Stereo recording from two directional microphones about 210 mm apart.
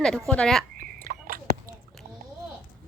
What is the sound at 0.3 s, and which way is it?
Speech, 5° left (ahead or behind).